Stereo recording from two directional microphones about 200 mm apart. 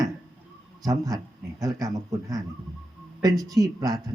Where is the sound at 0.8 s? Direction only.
20° right (ahead or behind).